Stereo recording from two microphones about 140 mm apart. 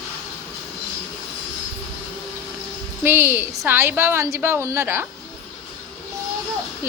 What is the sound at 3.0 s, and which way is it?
A woman's voice, 15° right (ahead or behind).